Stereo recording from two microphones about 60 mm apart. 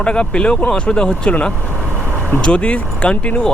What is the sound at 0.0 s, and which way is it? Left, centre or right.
Speech, centre.